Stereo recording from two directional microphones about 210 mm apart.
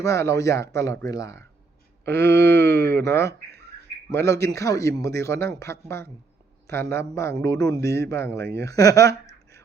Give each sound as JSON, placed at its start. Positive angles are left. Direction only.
{"t": 0.0, "sound": "a man's voice", "side_deg": 15}